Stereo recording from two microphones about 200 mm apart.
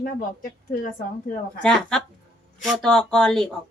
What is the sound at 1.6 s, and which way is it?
Speech, 5° left (ahead or behind).